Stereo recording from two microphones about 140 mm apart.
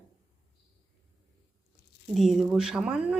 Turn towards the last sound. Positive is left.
turn(degrees=-5)  # may be behind; listen again after turning